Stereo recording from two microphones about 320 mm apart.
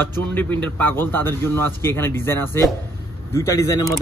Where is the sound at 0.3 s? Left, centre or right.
Centre.